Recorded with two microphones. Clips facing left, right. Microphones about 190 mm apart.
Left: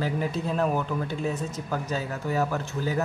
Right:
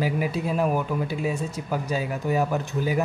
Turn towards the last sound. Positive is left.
turn(degrees=-15)  # may be behind; listen again after turning